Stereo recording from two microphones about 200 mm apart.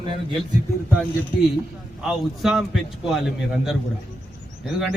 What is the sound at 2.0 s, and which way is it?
A man's voice, centre (ahead or behind).